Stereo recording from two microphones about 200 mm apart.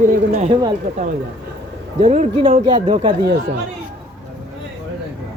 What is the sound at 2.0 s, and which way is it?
Speech, 35° right (ahead or behind).